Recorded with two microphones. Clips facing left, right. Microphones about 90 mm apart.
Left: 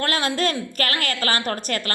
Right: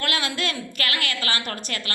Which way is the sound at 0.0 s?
40° left (ahead or behind).